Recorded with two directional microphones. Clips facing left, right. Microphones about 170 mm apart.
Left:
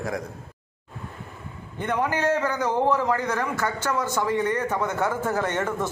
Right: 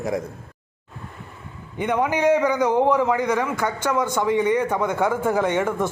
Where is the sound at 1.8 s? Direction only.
10° right (ahead or behind).